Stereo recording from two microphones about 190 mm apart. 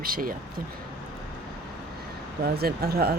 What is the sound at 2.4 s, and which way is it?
Speech, 55° right (ahead or behind).